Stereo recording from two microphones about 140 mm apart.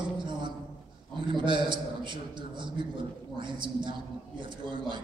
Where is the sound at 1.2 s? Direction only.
35° right (ahead or behind).